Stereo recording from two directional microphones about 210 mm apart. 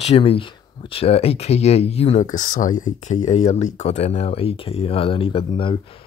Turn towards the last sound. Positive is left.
turn(degrees=25)  # may be behind; listen again after turning